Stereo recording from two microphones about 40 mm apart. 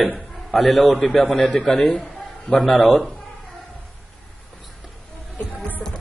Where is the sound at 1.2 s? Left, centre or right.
Centre.